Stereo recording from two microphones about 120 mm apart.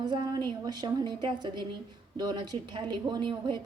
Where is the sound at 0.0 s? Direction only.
35° right (ahead or behind).